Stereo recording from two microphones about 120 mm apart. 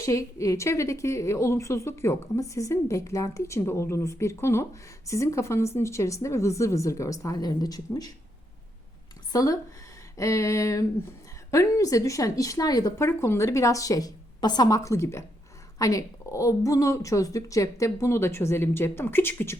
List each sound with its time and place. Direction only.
0.0 s a woman's voice: 25° left (ahead or behind)
9.3 s a woman's voice: 30° left (ahead or behind)
13.1 s a woman's voice: 20° left (ahead or behind)